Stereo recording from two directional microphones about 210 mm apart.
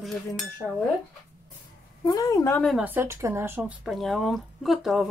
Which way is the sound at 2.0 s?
15° left (ahead or behind).